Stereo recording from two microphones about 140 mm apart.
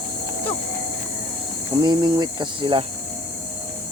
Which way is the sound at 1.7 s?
30° right (ahead or behind).